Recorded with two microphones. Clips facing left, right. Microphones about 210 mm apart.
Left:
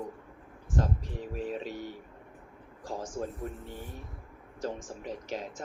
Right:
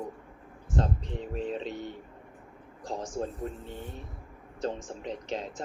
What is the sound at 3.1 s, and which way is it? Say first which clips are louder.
Speech: right 2 dB; 20° right (ahead or behind).